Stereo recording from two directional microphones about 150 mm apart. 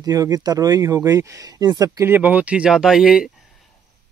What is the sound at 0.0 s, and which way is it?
Speech, 25° right (ahead or behind).